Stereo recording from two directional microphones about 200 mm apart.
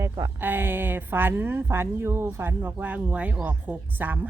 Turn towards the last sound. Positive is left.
turn(degrees=-10)  # may be behind; listen again after turning